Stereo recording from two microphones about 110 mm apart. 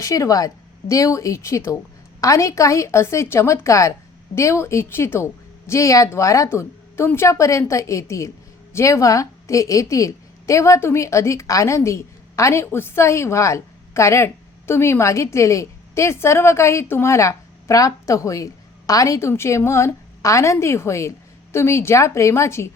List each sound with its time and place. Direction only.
0.0 s a woman's voice: 30° left (ahead or behind)